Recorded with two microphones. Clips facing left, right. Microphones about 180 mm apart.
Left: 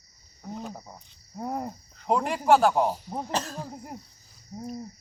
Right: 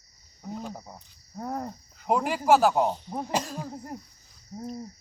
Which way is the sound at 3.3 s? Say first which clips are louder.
Right 2 dB; 10° right (ahead or behind).